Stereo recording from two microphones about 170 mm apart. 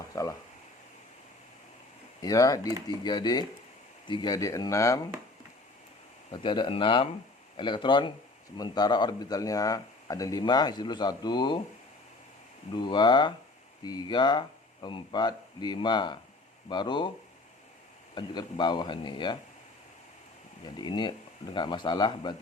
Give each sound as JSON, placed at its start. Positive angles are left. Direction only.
{"t": 0.1, "sound": "speech", "side_deg": 20}
{"t": 2.2, "sound": "speech", "side_deg": 20}
{"t": 6.3, "sound": "speech", "side_deg": 30}
{"t": 12.7, "sound": "speech", "side_deg": 25}
{"t": 18.1, "sound": "speech", "side_deg": 25}
{"t": 20.7, "sound": "speech", "side_deg": 25}